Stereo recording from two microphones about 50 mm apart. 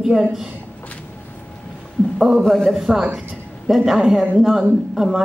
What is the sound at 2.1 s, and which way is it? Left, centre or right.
Speech, centre.